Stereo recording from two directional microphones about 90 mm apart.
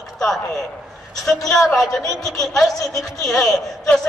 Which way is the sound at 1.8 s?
40° left (ahead or behind).